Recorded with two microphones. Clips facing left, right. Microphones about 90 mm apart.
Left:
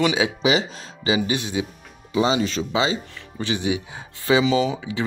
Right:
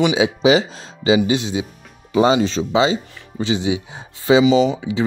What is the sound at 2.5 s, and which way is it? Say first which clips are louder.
Speech: right 5 dB; 30° right (ahead or behind).